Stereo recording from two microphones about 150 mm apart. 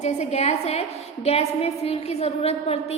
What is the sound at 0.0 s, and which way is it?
A woman's voice, 45° left (ahead or behind).